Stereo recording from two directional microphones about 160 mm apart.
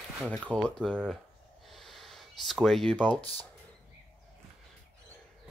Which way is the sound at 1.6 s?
Centre (ahead or behind).